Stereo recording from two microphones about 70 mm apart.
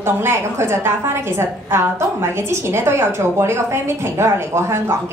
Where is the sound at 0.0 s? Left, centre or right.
Right.